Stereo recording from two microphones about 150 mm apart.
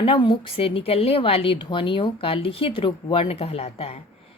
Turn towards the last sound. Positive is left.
turn(degrees=40)  # may be behind; listen again after turning